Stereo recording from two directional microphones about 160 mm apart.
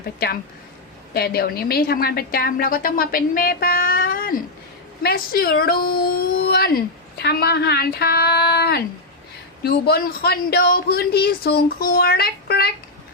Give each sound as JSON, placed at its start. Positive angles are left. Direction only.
{"t": 1.1, "sound": "a woman's voice", "side_deg": 75}
{"t": 9.6, "sound": "speech", "side_deg": 75}